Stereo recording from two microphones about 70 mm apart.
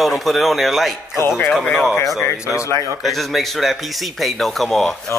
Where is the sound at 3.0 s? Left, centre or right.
Centre.